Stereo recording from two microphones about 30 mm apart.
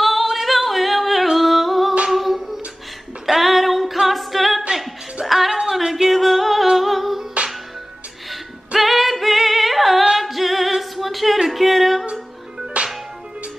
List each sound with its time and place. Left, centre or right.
0.0 s singing: centre
0.3 s yodeling: centre
1.4 s humming: centre
3.3 s female singing: centre
4.1 s a capella: centre
5.2 s music: centre
6.8 s humming: centre
8.3 s music: centre
12.7 s music: right